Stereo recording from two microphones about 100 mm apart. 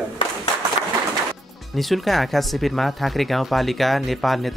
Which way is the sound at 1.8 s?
Centre (ahead or behind).